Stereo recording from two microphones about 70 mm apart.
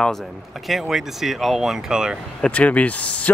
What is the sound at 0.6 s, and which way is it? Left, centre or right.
Speech, centre.